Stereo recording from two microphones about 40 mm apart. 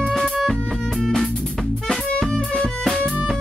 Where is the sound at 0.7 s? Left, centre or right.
Centre.